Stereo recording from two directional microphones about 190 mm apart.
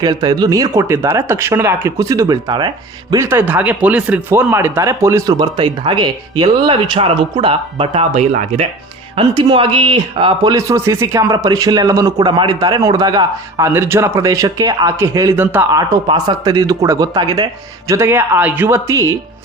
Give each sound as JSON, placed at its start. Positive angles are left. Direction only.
{"t": 0.0, "sound": "speech", "side_deg": -20}
{"t": 9.1, "sound": "speech", "side_deg": -25}